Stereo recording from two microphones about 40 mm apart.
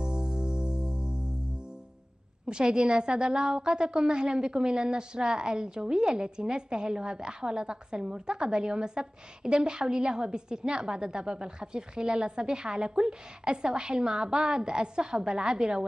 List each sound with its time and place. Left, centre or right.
0.0 s music: right
2.4 s a woman's voice: right